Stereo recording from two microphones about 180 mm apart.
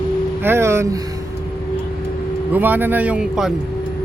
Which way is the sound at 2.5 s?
10° right (ahead or behind).